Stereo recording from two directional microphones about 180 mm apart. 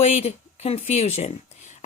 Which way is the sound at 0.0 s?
35° left (ahead or behind).